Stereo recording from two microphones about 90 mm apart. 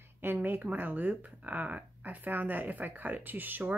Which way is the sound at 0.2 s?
20° right (ahead or behind).